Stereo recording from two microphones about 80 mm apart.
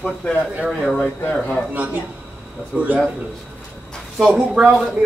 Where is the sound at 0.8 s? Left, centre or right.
Centre.